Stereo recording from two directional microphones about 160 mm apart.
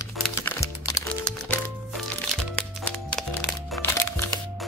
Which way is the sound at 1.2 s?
5° left (ahead or behind).